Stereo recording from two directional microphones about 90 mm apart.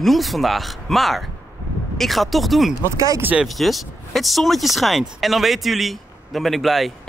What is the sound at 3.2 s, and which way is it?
Speech, 20° right (ahead or behind).